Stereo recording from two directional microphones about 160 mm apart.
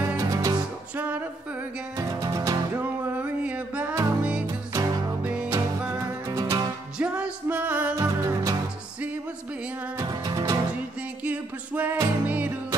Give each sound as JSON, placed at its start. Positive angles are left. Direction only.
{"t": 0.2, "sound": "music", "side_deg": -20}
{"t": 2.0, "sound": "music", "side_deg": -20}
{"t": 7.0, "sound": "music", "side_deg": -5}
{"t": 7.9, "sound": "music", "side_deg": -20}
{"t": 9.9, "sound": "music", "side_deg": -25}
{"t": 11.2, "sound": "music", "side_deg": -10}